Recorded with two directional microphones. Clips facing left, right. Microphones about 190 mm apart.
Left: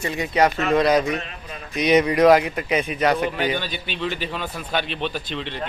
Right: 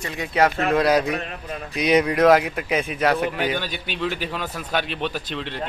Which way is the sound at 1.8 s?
Centre (ahead or behind).